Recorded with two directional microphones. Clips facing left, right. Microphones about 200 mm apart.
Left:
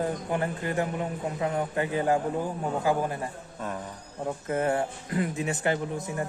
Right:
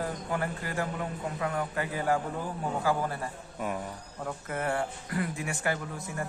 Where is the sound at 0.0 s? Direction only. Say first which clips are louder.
Left 4 dB; 20° left (ahead or behind).